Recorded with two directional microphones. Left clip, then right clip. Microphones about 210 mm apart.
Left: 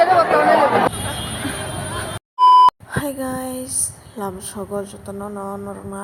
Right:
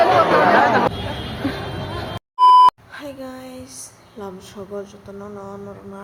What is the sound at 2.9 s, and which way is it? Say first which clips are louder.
A woman's voice: left 8 dB; 25° left (ahead or behind).